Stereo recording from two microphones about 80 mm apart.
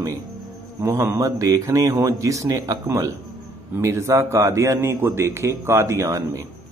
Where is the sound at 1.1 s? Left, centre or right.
Right.